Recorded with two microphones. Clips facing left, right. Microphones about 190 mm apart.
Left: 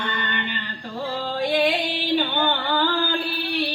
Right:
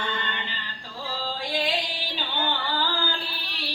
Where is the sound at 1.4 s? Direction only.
60° left (ahead or behind).